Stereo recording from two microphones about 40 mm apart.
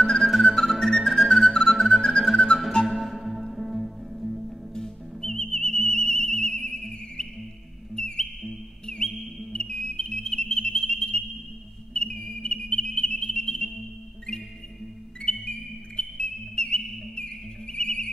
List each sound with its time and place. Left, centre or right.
0.0 s music: centre
2.9 s music: centre
4.8 s music: centre
9.5 s whistle: centre
15.3 s music: left
16.0 s whistle: left